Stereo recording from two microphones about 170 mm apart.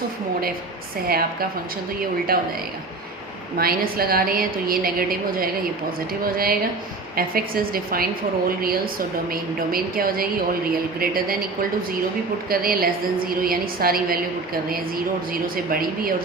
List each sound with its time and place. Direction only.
1.0 s a woman's voice: 60° right (ahead or behind)
3.6 s a woman's voice: 60° right (ahead or behind)
12.5 s a woman's voice: 60° right (ahead or behind)